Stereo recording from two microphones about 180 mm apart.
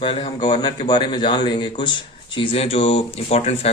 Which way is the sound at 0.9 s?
25° left (ahead or behind).